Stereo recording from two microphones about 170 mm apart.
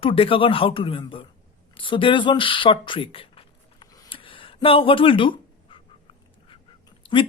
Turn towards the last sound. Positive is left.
turn(degrees=30)  # may be behind; listen again after turning